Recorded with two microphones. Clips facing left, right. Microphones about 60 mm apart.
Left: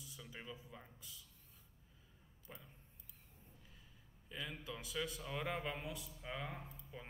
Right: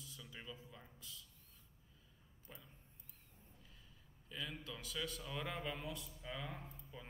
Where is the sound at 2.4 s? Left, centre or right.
Left.